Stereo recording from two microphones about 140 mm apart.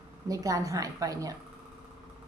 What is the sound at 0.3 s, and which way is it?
A woman's voice, 25° right (ahead or behind).